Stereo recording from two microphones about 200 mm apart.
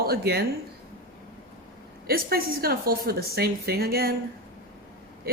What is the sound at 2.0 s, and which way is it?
Speech, 50° right (ahead or behind).